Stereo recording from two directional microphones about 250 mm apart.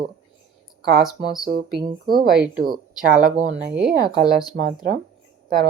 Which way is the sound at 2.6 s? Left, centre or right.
Right.